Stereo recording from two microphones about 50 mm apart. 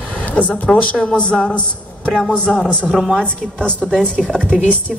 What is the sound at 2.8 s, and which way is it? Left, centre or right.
Speech, centre.